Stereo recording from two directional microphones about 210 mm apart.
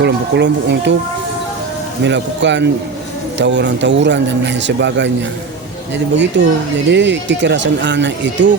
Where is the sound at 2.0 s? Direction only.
55° right (ahead or behind).